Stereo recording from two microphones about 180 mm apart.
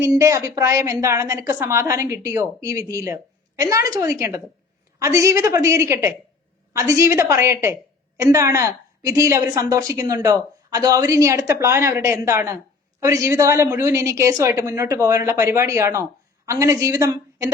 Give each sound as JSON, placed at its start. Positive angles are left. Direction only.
{"t": 0.0, "sound": "a woman's voice", "side_deg": -15}